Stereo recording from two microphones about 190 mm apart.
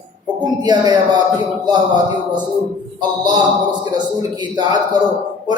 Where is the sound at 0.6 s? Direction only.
20° right (ahead or behind).